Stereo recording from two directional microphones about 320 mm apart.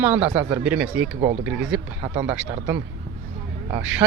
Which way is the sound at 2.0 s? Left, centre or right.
Centre.